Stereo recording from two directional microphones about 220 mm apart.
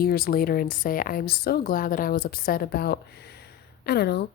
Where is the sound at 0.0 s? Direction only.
45° left (ahead or behind).